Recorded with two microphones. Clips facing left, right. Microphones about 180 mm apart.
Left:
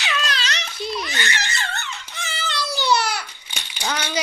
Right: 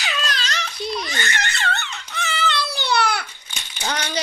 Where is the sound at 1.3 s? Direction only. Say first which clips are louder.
Right 3 dB; 60° right (ahead or behind).